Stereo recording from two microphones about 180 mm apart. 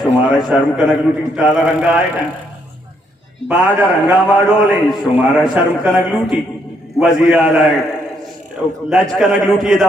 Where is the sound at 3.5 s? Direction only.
10° right (ahead or behind).